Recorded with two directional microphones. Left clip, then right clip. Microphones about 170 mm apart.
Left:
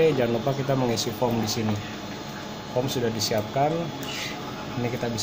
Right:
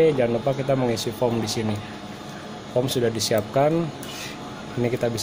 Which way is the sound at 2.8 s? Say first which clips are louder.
Right 3 dB; 55° right (ahead or behind).